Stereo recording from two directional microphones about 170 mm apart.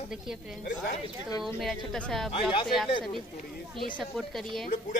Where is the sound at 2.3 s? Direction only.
30° left (ahead or behind).